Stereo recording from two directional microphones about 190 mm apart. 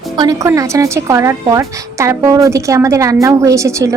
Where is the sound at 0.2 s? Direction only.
20° right (ahead or behind).